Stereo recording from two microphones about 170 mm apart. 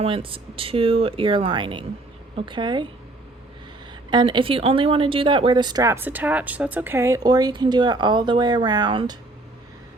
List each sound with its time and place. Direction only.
0.0 s speech: 30° right (ahead or behind)
4.1 s speech: 30° right (ahead or behind)